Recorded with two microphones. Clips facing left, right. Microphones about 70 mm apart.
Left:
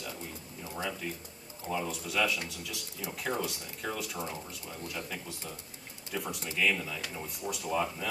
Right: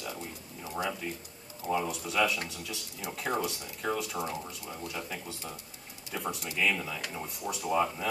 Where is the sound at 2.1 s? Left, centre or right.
Right.